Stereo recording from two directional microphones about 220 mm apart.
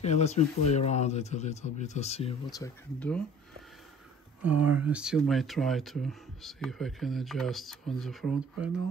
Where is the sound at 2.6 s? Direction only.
10° left (ahead or behind).